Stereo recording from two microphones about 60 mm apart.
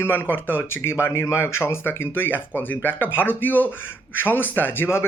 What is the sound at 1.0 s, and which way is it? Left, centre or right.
Speech, left.